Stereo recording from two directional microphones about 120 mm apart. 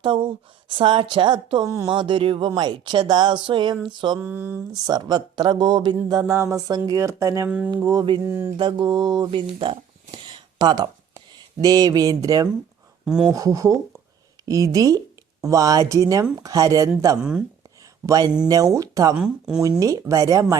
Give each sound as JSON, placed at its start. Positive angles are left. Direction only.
{"t": 0.0, "sound": "a woman's voice", "side_deg": -45}
{"t": 1.6, "sound": "speech", "side_deg": -25}
{"t": 1.9, "sound": "a woman's voice", "side_deg": -45}
{"t": 4.2, "sound": "speech", "side_deg": -15}
{"t": 4.7, "sound": "speech", "side_deg": -35}
{"t": 7.4, "sound": "speech", "side_deg": -10}
{"t": 7.7, "sound": "speech", "side_deg": -35}
{"t": 8.3, "sound": "speech", "side_deg": -20}
{"t": 8.5, "sound": "speech", "side_deg": -40}
{"t": 13.1, "sound": "speech", "side_deg": -5}
{"t": 13.3, "sound": "speech", "side_deg": -30}
{"t": 18.0, "sound": "speech", "side_deg": -30}
{"t": 19.1, "sound": "speech", "side_deg": -5}
{"t": 19.8, "sound": "speech", "side_deg": -25}